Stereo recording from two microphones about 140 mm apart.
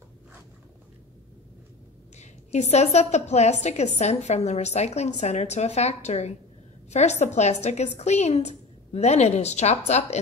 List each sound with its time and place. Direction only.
2.1 s a woman's voice: 55° left (ahead or behind)